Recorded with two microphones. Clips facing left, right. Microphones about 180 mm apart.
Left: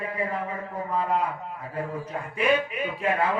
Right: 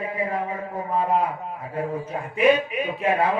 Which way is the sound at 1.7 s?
25° right (ahead or behind).